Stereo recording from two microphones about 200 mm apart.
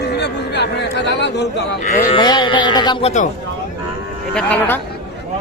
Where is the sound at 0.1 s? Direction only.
55° left (ahead or behind).